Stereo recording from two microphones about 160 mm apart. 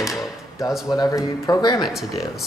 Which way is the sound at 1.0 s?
20° left (ahead or behind).